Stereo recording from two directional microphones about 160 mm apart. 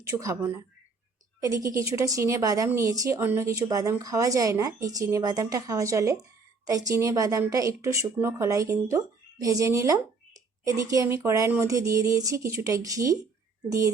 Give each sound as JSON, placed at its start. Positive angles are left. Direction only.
{"t": 0.1, "sound": "a woman's voice", "side_deg": -20}